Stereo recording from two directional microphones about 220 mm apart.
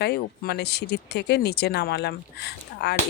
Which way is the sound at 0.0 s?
50° left (ahead or behind).